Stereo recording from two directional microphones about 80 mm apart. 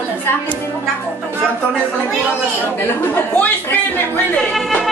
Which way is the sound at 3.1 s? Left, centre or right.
Left.